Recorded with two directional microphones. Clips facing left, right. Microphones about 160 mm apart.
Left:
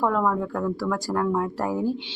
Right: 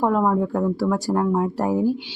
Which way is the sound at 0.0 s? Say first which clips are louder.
Right 4 dB; 15° right (ahead or behind).